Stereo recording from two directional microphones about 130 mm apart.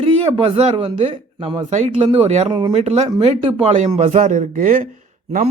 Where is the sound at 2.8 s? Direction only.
55° right (ahead or behind).